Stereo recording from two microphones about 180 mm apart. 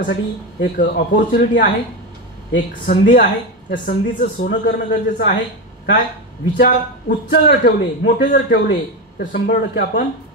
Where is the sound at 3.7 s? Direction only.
50° left (ahead or behind); by 5.4 s 70° left (ahead or behind).